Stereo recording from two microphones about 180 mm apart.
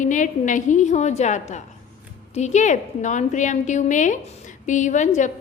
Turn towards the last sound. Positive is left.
turn(degrees=45)  # may be behind; listen again after turning